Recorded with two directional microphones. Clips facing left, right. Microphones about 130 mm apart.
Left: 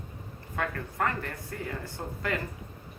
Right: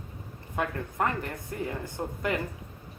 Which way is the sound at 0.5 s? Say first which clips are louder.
Right 2 dB; 20° right (ahead or behind).